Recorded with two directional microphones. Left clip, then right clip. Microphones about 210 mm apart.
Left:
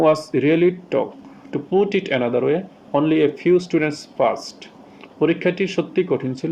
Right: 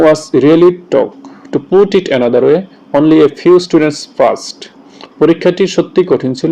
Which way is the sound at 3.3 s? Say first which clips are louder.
Right 10 dB; 50° right (ahead or behind).